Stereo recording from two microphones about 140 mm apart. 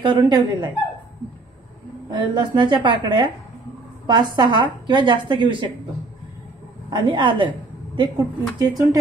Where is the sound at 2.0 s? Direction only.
35° right (ahead or behind).